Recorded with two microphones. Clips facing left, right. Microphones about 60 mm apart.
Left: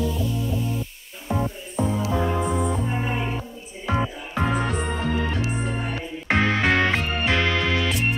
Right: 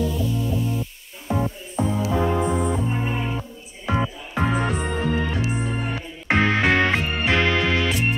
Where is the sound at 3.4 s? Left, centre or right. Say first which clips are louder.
Even; centre.